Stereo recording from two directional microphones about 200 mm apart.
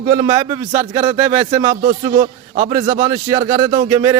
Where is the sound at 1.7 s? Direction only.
45° right (ahead or behind).